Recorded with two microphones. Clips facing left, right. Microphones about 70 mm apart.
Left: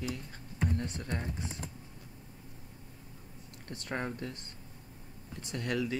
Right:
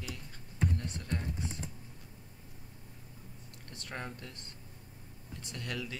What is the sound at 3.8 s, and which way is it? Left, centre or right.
Speech, left.